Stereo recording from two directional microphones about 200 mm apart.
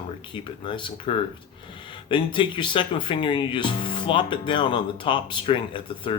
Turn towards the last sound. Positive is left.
turn(degrees=25)  # may be behind; listen again after turning